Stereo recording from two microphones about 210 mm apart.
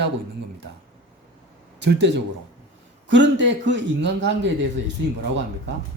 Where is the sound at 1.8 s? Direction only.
55° right (ahead or behind).